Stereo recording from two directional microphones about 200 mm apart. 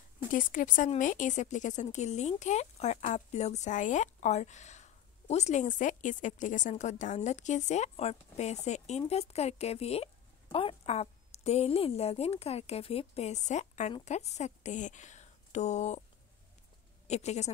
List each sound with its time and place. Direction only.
0.3 s a woman's voice: 40° left (ahead or behind)
17.1 s a woman's voice: 35° left (ahead or behind)